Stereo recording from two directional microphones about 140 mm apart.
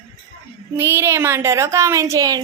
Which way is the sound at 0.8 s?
20° right (ahead or behind).